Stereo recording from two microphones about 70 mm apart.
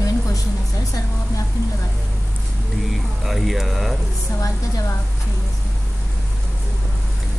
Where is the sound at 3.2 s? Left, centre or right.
Centre.